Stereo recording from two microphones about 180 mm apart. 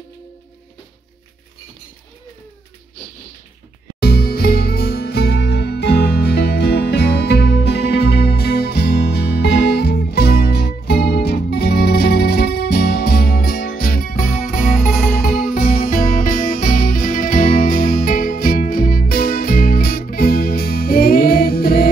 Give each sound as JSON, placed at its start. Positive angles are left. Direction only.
{"t": 4.0, "sound": "music", "side_deg": 60}